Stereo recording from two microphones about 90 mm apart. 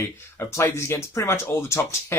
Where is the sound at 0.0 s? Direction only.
30° left (ahead or behind).